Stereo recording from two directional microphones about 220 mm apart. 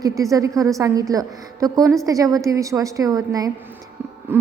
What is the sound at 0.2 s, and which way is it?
A woman's voice, 15° right (ahead or behind).